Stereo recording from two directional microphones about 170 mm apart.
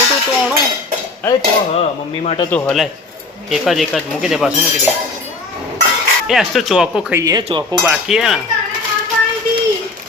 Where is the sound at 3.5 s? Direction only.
Centre (ahead or behind).